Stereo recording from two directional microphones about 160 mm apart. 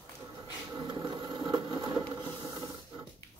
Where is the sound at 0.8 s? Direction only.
30° right (ahead or behind).